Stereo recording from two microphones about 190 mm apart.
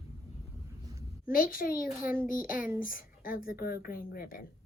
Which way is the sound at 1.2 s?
50° left (ahead or behind).